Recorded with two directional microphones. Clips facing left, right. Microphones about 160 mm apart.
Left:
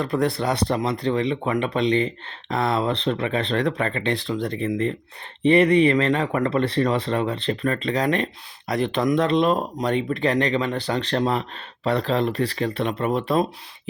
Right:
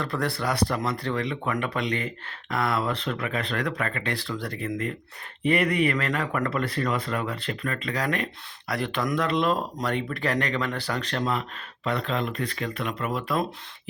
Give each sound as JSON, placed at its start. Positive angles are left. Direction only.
{"t": 0.0, "sound": "speech", "side_deg": 20}